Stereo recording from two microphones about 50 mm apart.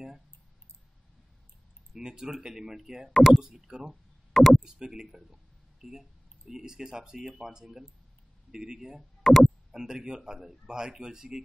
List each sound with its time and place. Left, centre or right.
2.0 s a man's voice: centre
3.1 s speech: centre
3.3 s a man's voice: centre
4.3 s speech: centre
4.6 s a man's voice: centre
9.2 s a sound: centre
9.7 s a man's voice: centre